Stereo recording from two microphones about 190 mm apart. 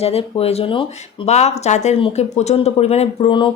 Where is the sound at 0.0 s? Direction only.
30° left (ahead or behind).